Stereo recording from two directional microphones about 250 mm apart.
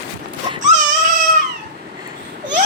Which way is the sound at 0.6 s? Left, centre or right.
Right.